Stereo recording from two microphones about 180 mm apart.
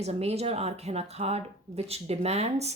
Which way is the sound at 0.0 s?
35° right (ahead or behind).